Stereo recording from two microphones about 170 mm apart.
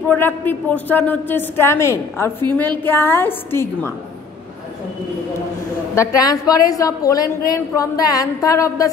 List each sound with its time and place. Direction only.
0.1 s a woman's voice: 10° left (ahead or behind)
5.9 s a woman's voice: 20° left (ahead or behind)